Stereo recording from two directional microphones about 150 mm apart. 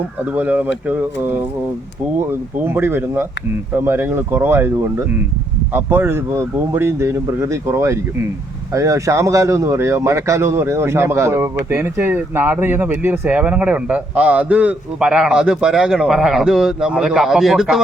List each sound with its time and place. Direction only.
0.3 s speech: 10° right (ahead or behind)
2.6 s speech: 15° right (ahead or behind)